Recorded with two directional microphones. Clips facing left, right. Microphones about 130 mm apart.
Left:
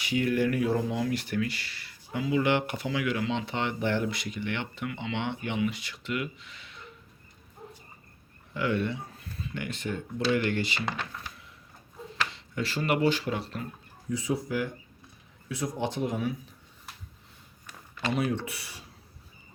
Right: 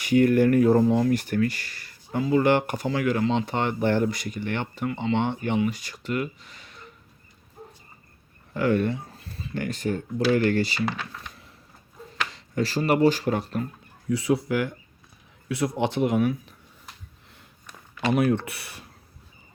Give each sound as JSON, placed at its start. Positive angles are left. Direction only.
{"t": 0.0, "sound": "speech", "side_deg": -50}
{"t": 8.5, "sound": "speech", "side_deg": -45}
{"t": 12.3, "sound": "speech", "side_deg": -40}
{"t": 14.1, "sound": "speech", "side_deg": -75}
{"t": 18.1, "sound": "speech", "side_deg": -55}